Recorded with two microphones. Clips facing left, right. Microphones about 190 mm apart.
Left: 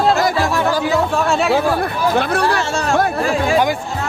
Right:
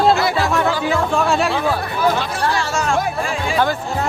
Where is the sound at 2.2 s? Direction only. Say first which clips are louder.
Left 4 dB; 60° left (ahead or behind).